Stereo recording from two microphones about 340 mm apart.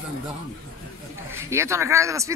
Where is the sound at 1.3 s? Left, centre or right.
Centre.